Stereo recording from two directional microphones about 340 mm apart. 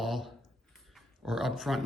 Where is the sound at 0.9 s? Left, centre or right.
Centre.